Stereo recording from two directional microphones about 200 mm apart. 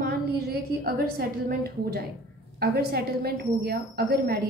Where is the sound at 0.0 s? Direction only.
50° right (ahead or behind).